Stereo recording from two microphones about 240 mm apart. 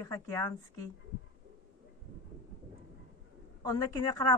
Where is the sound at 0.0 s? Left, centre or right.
Centre.